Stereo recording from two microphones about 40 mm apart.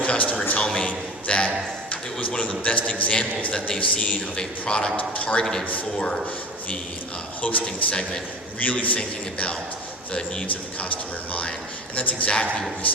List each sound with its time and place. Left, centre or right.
0.0 s a sound: left
0.6 s a man's voice: centre
1.9 s a man's voice: left
4.4 s a man's voice: left
4.9 s a man's voice: left
7.4 s a man's voice: left
9.0 s a man's voice: left
10.5 s a man's voice: left